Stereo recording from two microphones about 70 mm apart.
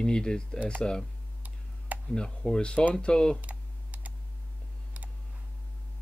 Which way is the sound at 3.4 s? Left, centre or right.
Right.